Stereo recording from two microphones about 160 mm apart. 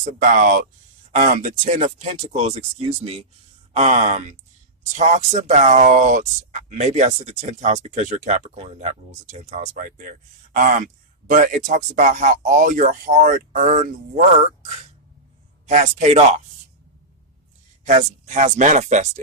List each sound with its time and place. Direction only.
0.0 s speech: 55° right (ahead or behind)
17.8 s speech: 50° right (ahead or behind)